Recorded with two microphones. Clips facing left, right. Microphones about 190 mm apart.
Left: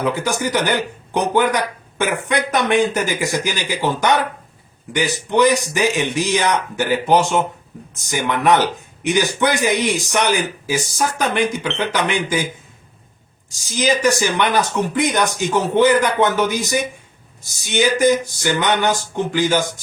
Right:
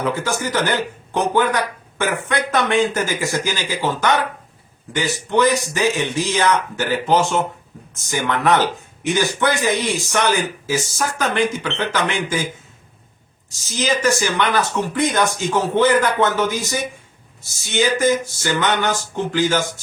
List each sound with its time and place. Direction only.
0.0 s a man's voice: 15° left (ahead or behind)
13.7 s a man's voice: 15° left (ahead or behind)